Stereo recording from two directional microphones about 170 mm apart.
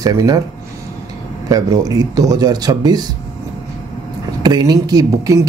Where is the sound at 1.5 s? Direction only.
20° right (ahead or behind).